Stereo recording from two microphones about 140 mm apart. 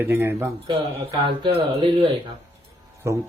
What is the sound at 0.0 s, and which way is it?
Speech, 15° right (ahead or behind).